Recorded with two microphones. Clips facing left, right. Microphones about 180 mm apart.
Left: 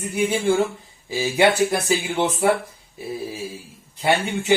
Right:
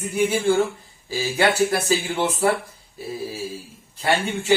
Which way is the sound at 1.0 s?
15° left (ahead or behind).